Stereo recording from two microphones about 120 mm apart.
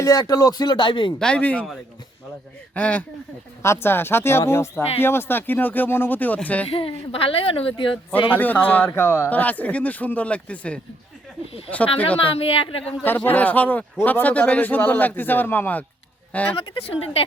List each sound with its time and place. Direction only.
0.0 s speech: 30° left (ahead or behind)
1.2 s speech: 10° left (ahead or behind)
2.7 s speech: 10° left (ahead or behind)
6.7 s a woman's voice: 50° left (ahead or behind)
8.3 s speech: 15° left (ahead or behind)
12.0 s a woman's voice: 50° left (ahead or behind)
13.1 s speech: 15° left (ahead or behind)
16.6 s a woman's voice: 55° left (ahead or behind)